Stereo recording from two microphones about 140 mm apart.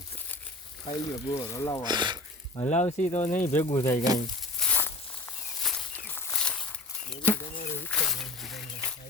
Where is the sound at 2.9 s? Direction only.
55° left (ahead or behind).